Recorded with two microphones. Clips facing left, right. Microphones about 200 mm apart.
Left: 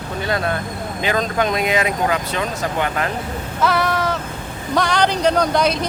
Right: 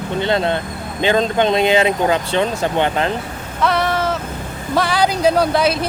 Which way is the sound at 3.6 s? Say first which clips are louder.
Right 1 dB; centre (ahead or behind).